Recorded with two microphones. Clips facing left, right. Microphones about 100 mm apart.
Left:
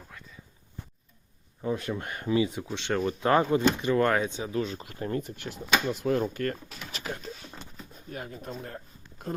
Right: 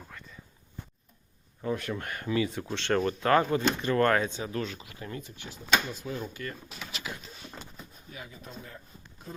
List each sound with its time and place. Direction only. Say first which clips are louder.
1.6 s speech: left 1 dB; 20° left (ahead or behind)
2.6 s speech: right 1 dB; 10° left (ahead or behind)
3.2 s speech: left 3 dB; 20° left (ahead or behind)
4.8 s speech: left 8 dB; 45° left (ahead or behind)
5.4 s speech: right 2 dB; 60° left (ahead or behind)
6.9 s a sound: left 4 dB; 45° left (ahead or behind)
8.1 s speech: left 7 dB; 50° left (ahead or behind)